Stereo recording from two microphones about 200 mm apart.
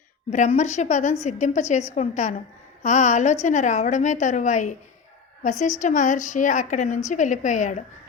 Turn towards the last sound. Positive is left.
turn(degrees=40)  # may be behind; listen again after turning